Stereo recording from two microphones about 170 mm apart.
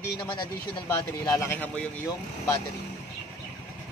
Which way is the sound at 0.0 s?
25° left (ahead or behind).